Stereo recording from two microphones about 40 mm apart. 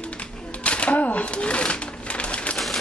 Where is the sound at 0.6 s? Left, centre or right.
Left.